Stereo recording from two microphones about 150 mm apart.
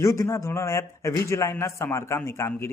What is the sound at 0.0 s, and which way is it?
A man's voice, 20° left (ahead or behind).